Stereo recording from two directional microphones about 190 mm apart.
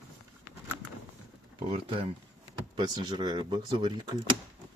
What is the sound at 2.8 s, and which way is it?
Speech, 20° right (ahead or behind).